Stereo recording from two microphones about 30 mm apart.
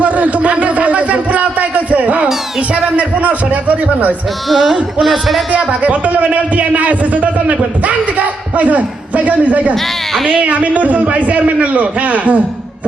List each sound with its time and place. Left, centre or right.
0.0 s a sound: right
2.6 s a man's voice: right
4.4 s speech: centre
5.8 s a man's voice: right
9.7 s a woman's voice: centre
10.4 s a man's voice: right